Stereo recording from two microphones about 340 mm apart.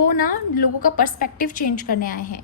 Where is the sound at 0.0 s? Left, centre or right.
Left.